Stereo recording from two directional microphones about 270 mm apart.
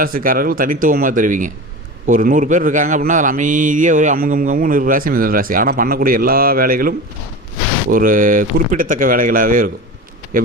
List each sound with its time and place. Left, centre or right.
0.0 s a man's voice: right